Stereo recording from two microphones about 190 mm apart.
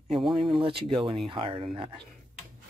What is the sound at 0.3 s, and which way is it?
Speech, 30° right (ahead or behind).